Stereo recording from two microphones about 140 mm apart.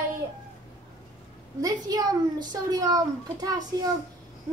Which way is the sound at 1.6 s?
25° right (ahead or behind).